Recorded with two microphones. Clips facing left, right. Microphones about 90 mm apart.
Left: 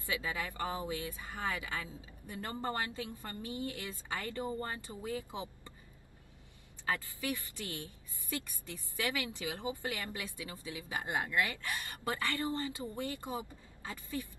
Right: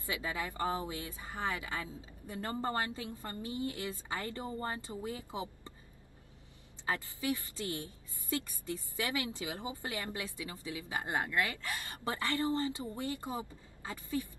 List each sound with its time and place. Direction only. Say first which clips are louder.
0.0 s speech: even; 25° right (ahead or behind)
6.9 s speech: right 1 dB; 25° right (ahead or behind)